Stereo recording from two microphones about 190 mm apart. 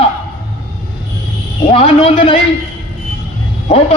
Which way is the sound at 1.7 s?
30° left (ahead or behind).